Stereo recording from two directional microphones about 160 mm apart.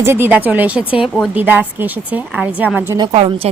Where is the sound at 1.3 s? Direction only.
10° right (ahead or behind).